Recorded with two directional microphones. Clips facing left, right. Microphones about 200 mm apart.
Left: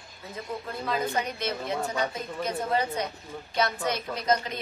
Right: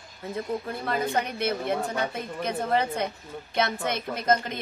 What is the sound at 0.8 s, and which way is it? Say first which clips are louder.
A woman's voice: even; 55° right (ahead or behind).